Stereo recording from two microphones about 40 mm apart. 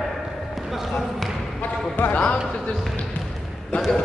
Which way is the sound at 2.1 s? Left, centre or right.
Left.